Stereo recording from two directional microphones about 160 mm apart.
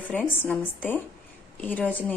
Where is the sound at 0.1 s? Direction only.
5° left (ahead or behind).